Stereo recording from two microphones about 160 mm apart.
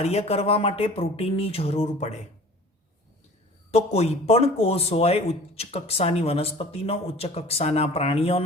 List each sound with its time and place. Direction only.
0.0 s a man's voice: 40° left (ahead or behind)
3.7 s a man's voice: 40° left (ahead or behind)